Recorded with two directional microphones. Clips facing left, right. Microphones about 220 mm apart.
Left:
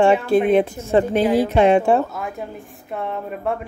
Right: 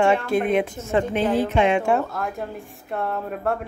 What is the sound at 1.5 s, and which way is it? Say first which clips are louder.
Speech: left 5 dB; 35° left (ahead or behind).